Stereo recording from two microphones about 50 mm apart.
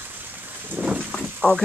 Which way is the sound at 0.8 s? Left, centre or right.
Right.